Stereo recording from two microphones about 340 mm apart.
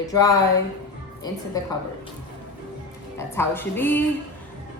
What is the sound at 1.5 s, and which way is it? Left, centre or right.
Speech, centre.